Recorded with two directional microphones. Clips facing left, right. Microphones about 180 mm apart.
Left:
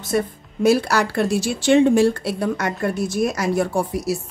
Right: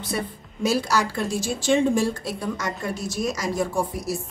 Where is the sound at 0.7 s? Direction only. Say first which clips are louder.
Left 5 dB; 60° left (ahead or behind).